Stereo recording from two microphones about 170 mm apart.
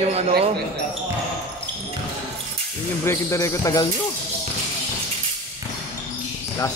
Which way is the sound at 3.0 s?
15° left (ahead or behind).